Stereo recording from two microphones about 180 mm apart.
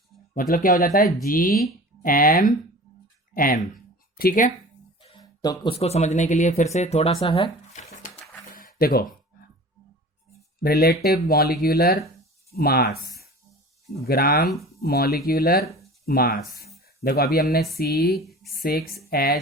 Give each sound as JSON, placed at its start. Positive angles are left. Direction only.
{"t": 0.5, "sound": "speech", "side_deg": 50}
{"t": 5.0, "sound": "speech", "side_deg": 25}
{"t": 8.5, "sound": "a sound", "side_deg": 55}
{"t": 10.6, "sound": "speech", "side_deg": 60}